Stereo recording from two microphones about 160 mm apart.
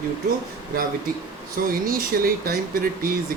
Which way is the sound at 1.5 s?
65° right (ahead or behind).